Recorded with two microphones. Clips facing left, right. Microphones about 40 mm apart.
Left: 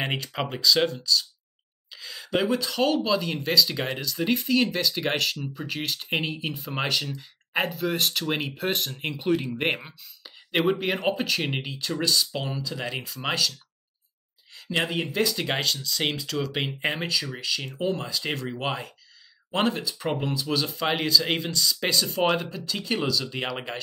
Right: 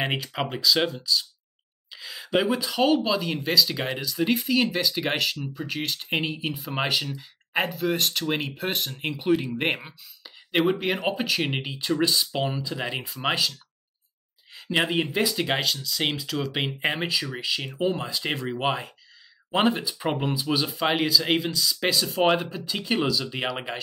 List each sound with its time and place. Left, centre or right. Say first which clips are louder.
0.0 s speech: right 1 dB; centre